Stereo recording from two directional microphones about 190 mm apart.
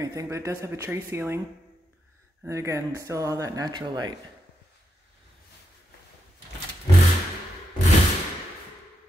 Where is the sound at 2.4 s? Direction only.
15° right (ahead or behind).